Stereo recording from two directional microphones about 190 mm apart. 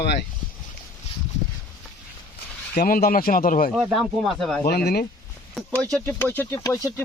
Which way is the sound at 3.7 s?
5° right (ahead or behind).